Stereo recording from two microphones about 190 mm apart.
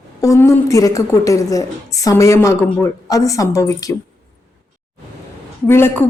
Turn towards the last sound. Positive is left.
turn(degrees=10)  # may be behind; listen again after turning